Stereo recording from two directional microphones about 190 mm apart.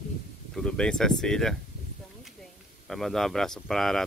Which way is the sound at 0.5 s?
5° left (ahead or behind).